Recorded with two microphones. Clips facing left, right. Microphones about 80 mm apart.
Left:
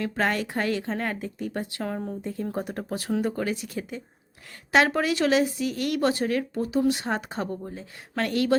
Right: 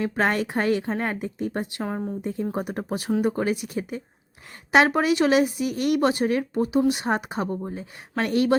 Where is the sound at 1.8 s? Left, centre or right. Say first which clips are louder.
Right 2 dB; centre.